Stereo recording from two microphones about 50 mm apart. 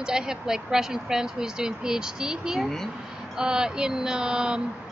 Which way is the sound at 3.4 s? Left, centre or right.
Centre.